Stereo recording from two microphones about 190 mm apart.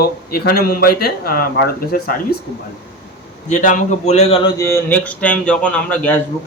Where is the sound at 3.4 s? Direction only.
40° left (ahead or behind).